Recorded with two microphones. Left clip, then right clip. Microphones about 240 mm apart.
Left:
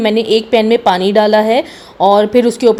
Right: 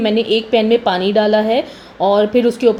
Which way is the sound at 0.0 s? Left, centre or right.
Left.